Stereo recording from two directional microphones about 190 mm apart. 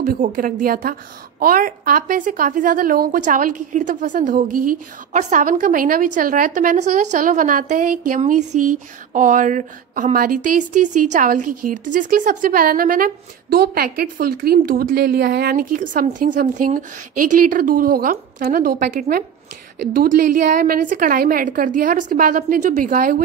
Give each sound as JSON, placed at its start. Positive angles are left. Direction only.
{"t": 0.0, "sound": "speech", "side_deg": -45}